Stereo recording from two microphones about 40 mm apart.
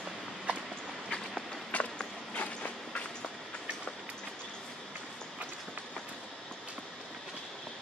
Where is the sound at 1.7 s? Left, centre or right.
Left.